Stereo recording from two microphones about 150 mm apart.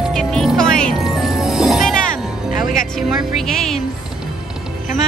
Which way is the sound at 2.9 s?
Centre (ahead or behind).